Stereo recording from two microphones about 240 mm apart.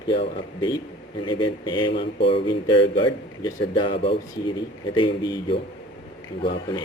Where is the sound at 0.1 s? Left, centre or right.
Centre.